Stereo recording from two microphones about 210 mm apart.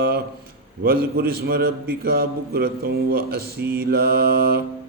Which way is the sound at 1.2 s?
45° right (ahead or behind).